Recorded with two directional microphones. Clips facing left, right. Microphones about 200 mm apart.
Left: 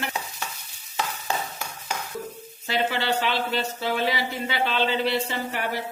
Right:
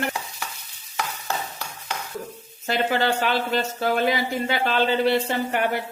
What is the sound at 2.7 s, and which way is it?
Speech, 45° right (ahead or behind).